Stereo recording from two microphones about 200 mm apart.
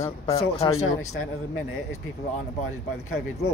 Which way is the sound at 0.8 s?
90° left.